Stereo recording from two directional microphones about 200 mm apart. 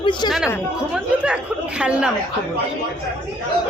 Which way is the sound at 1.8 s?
5° right (ahead or behind).